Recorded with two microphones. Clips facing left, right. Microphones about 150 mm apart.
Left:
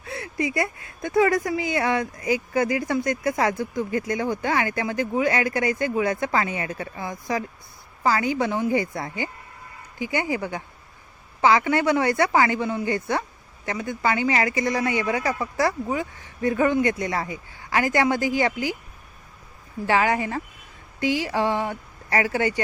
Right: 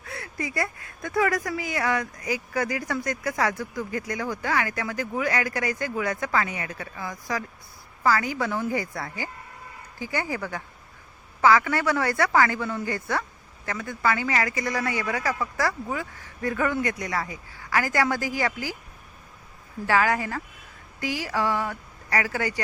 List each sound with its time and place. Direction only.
0.0 s speech: 25° left (ahead or behind)
19.9 s speech: 20° left (ahead or behind)